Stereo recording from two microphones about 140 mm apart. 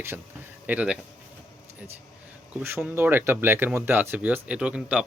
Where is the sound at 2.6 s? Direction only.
15° right (ahead or behind).